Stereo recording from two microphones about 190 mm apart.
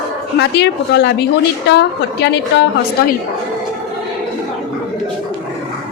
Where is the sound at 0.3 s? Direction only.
60° left (ahead or behind).